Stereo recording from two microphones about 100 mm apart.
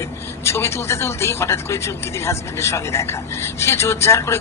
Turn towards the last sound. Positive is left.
turn(degrees=25)  # may be behind; listen again after turning